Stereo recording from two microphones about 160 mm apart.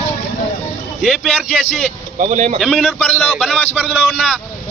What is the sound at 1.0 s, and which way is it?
Speech, 5° right (ahead or behind).